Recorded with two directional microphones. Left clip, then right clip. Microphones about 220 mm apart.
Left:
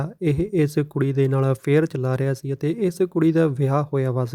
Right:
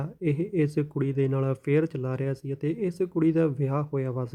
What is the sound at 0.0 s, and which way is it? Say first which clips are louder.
Speech: left 5 dB; 25° left (ahead or behind).